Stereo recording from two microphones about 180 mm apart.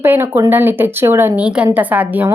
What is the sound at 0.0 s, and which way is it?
Speech, 10° right (ahead or behind).